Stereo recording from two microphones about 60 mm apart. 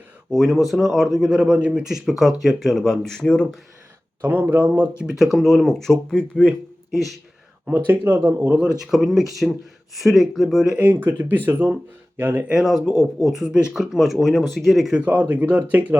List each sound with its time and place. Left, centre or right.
0.3 s speech: centre
1.4 s speech: centre
4.2 s speech: right
5.1 s speech: centre
6.9 s speech: centre
7.9 s speech: right
8.8 s speech: centre
10.8 s speech: right
13.2 s speech: centre
13.9 s speech: centre
14.9 s speech: right